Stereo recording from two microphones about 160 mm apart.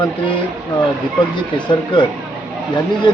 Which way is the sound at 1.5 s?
30° left (ahead or behind).